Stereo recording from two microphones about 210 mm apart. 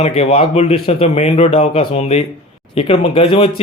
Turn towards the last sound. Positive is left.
turn(degrees=25)  # may be behind; listen again after turning